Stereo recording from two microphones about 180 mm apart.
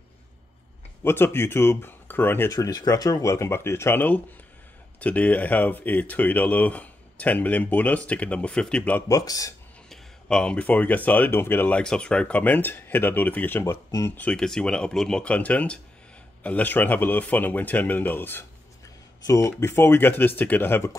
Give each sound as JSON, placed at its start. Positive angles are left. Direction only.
{"t": 1.0, "sound": "speech", "side_deg": 15}
{"t": 9.1, "sound": "speech", "side_deg": 20}
{"t": 9.8, "sound": "speech", "side_deg": 5}